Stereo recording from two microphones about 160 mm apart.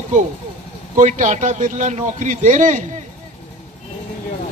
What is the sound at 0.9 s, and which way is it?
A man's voice, 50° right (ahead or behind).